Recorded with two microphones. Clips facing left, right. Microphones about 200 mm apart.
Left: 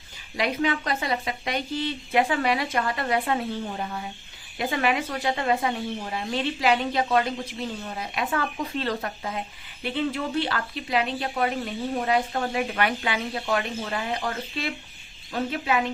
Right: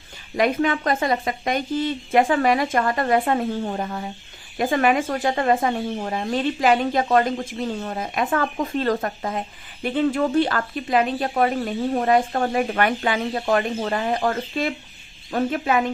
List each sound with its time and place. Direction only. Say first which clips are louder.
0.3 s speech: right 5 dB; 50° right (ahead or behind)